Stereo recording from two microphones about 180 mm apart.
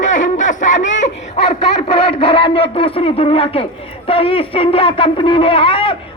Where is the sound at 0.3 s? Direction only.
45° left (ahead or behind).